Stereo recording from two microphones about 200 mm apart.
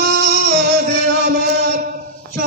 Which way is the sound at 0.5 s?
55° right (ahead or behind).